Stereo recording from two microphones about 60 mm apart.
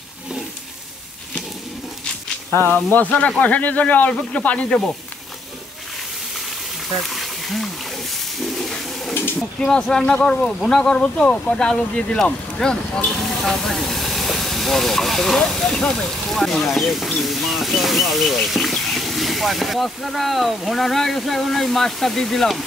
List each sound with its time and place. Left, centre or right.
2.7 s speech: left
7.0 s roaring cats: centre
9.6 s speech: centre
16.3 s speech: centre